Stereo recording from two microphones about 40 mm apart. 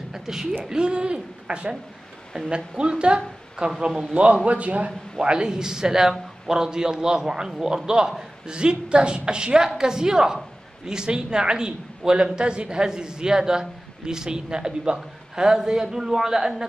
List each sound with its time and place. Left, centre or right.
0.1 s speech: centre
0.7 s a woman's voice: right
2.8 s a woman's voice: right
5.2 s a woman's voice: right